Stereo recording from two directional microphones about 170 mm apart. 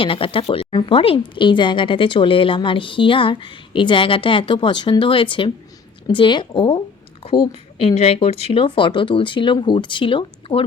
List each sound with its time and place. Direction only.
0.0 s a woman's voice: 30° left (ahead or behind)